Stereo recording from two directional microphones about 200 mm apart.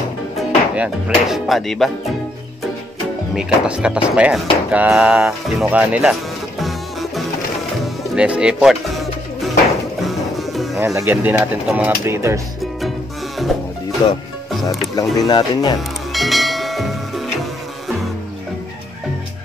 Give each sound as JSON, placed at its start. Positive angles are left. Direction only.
{"t": 0.4, "sound": "speech", "side_deg": -5}
{"t": 3.3, "sound": "speech", "side_deg": -5}
{"t": 6.6, "sound": "music", "side_deg": 0}
{"t": 11.0, "sound": "speech", "side_deg": -10}
{"t": 13.5, "sound": "music", "side_deg": 0}
{"t": 15.1, "sound": "speech", "side_deg": 20}
{"t": 16.1, "sound": "bell", "side_deg": 0}